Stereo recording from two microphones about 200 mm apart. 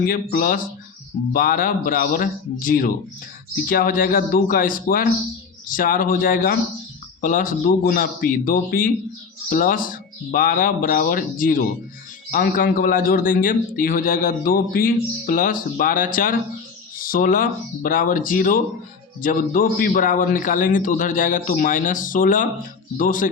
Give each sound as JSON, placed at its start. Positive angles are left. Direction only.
{"t": 0.0, "sound": "a man's voice", "side_deg": 45}